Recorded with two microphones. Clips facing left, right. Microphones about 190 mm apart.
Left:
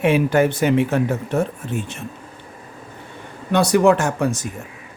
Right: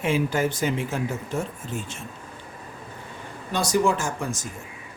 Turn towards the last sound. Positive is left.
turn(degrees=65)  # may be behind; listen again after turning